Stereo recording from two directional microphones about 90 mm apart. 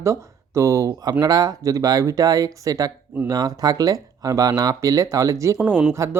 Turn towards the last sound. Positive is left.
turn(degrees=-30)  # may be behind; listen again after turning